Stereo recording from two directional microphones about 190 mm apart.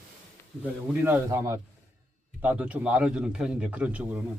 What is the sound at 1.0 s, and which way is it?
A man's voice, 15° right (ahead or behind).